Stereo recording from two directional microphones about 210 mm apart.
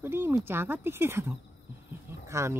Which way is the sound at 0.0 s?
10° right (ahead or behind).